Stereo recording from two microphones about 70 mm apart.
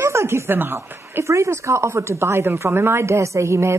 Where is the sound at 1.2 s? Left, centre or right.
Right.